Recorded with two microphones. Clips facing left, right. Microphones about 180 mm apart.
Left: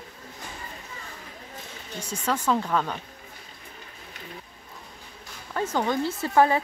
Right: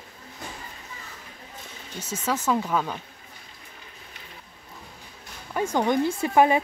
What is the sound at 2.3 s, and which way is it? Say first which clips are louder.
Speech: even; 5° right (ahead or behind).